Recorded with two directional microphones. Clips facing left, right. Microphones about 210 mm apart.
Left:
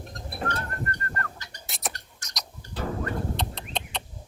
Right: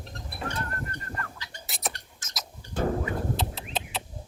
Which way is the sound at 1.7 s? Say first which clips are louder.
Even; centre (ahead or behind).